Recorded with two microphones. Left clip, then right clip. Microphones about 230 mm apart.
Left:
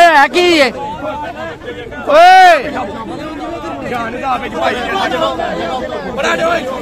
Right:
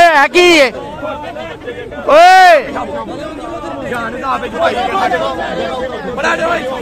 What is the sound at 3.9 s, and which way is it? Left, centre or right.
Speech, centre.